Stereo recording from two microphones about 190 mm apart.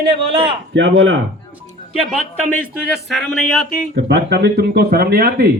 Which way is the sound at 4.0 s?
65° right (ahead or behind).